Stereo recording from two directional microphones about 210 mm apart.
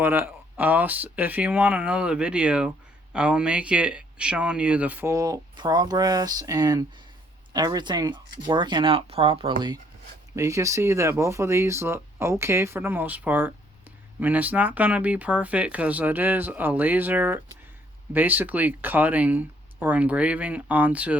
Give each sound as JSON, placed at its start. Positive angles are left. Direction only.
{"t": 0.0, "sound": "speech", "side_deg": -10}